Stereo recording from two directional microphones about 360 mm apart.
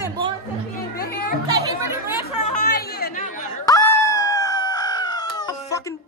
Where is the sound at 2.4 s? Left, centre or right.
Left.